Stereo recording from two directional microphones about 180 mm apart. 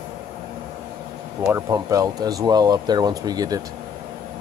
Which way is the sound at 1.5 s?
20° right (ahead or behind).